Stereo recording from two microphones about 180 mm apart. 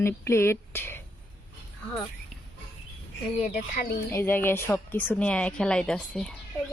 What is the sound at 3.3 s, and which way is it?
Speech, 40° left (ahead or behind).